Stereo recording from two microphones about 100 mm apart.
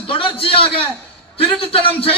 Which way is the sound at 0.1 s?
60° left (ahead or behind).